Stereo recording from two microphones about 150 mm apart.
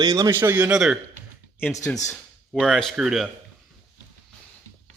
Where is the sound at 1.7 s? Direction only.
20° left (ahead or behind).